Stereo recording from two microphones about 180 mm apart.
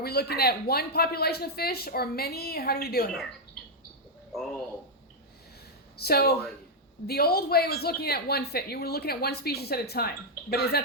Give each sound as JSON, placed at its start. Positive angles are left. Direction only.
{"t": 0.0, "sound": "speech", "side_deg": 60}
{"t": 6.0, "sound": "speech", "side_deg": 60}